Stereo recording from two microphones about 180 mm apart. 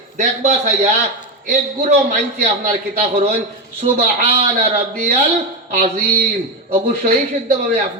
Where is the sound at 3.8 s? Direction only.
35° right (ahead or behind).